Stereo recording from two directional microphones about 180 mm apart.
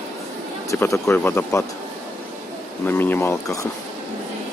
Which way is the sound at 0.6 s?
15° left (ahead or behind).